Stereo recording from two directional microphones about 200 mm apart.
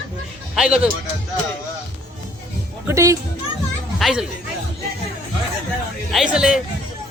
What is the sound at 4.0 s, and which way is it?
Speech, centre (ahead or behind).